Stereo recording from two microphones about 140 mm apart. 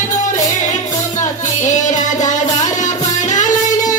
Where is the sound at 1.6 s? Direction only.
60° left (ahead or behind).